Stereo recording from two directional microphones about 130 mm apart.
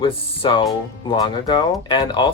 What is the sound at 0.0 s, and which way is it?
Speech, 40° left (ahead or behind).